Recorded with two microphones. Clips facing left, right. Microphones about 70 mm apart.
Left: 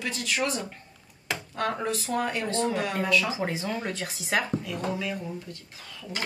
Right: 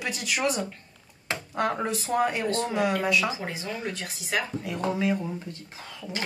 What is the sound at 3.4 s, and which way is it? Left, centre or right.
Speech, left.